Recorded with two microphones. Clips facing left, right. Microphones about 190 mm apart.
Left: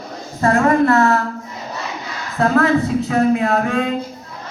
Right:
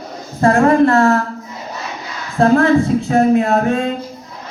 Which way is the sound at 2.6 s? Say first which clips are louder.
Right 3 dB; 45° right (ahead or behind).